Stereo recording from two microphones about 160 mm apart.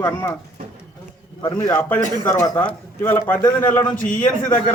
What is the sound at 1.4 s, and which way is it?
Speech, 30° left (ahead or behind).